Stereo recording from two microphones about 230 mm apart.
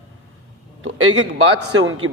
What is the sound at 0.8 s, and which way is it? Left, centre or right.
A man's voice, right.